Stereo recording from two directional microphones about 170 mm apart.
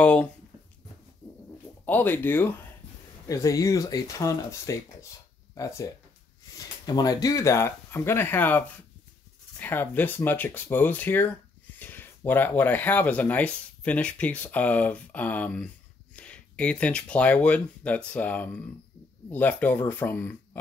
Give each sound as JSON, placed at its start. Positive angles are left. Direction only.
{"t": 0.0, "sound": "speech", "side_deg": 5}
{"t": 1.9, "sound": "speech", "side_deg": 10}
{"t": 6.9, "sound": "speech", "side_deg": 20}